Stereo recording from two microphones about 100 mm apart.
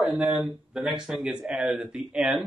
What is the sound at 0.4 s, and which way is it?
Speech, 5° right (ahead or behind).